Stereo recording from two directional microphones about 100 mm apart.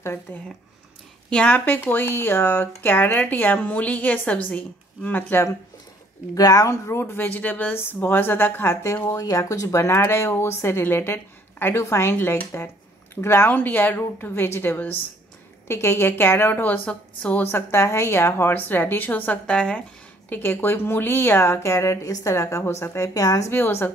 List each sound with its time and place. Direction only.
0.0 s speech: 25° left (ahead or behind)
1.3 s speech: 10° left (ahead or behind)
6.3 s speech: 35° left (ahead or behind)
9.1 s speech: 35° left (ahead or behind); by 17.5 s 15° left (ahead or behind)
17.5 s speech: 25° left (ahead or behind)
20.2 s speech: 20° left (ahead or behind)
23.5 s speech: 25° left (ahead or behind)